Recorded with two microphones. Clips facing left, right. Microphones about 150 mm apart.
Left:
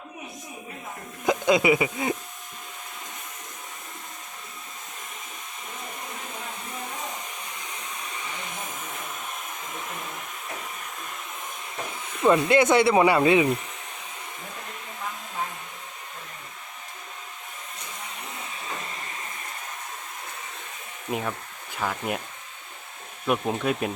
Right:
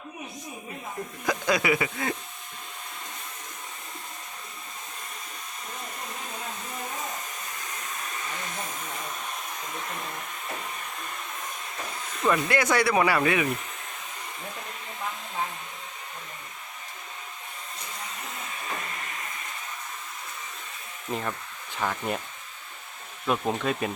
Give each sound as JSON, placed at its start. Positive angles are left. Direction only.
{"t": 1.2, "sound": "speech", "side_deg": 20}
{"t": 8.2, "sound": "hair dryer", "side_deg": 15}
{"t": 12.2, "sound": "speech", "side_deg": 25}
{"t": 21.1, "sound": "speech", "side_deg": 10}
{"t": 23.2, "sound": "speech", "side_deg": 5}